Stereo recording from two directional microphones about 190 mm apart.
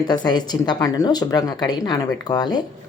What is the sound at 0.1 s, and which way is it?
Speech, 20° left (ahead or behind).